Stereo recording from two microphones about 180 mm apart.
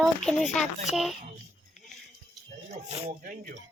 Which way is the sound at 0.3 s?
Centre (ahead or behind).